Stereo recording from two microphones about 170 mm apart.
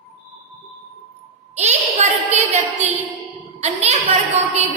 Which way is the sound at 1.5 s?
40° right (ahead or behind).